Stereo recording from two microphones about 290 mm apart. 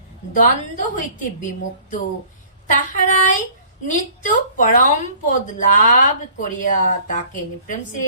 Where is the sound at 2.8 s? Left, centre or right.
Left.